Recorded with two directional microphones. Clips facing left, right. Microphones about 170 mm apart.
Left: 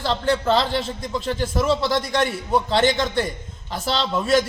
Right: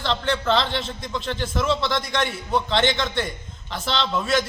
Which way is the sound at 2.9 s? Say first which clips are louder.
Left 3 dB; 10° left (ahead or behind).